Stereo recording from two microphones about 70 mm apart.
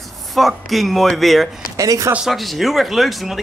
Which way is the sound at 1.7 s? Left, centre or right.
Right.